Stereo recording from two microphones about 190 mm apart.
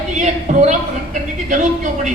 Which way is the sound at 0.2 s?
40° right (ahead or behind).